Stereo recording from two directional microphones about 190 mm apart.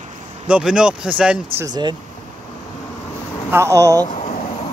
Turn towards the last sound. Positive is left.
turn(degrees=35)  # may be behind; listen again after turning